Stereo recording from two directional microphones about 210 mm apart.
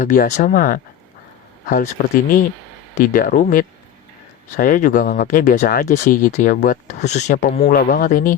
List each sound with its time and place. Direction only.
0.0 s speech: 35° left (ahead or behind)